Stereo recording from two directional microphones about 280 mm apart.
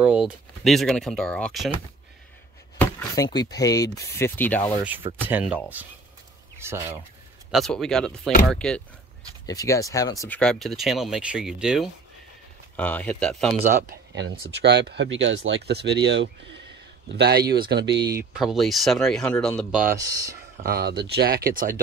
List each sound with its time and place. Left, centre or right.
0.0 s speech: centre
2.8 s chop: centre
3.3 s speech: centre
4.8 s speech: centre
6.6 s speech: centre
14.3 s speech: right
18.4 s speech: centre
19.9 s speech: centre
20.6 s speech: right